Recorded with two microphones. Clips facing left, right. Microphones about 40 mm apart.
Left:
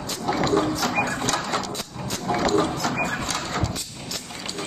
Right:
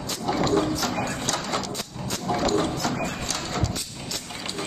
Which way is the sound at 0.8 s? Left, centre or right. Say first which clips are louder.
Left 3 dB; left.